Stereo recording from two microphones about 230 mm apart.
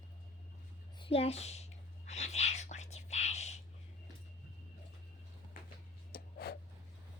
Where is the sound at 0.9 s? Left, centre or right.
Left.